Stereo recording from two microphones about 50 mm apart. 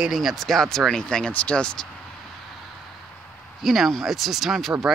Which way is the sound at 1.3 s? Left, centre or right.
Left.